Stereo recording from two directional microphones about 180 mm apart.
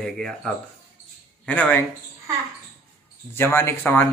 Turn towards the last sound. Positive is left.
turn(degrees=10)  # may be behind; listen again after turning